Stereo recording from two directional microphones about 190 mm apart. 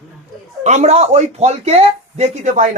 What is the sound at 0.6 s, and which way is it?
Speech, 40° right (ahead or behind).